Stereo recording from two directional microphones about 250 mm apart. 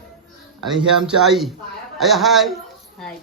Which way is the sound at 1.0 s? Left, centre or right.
Centre.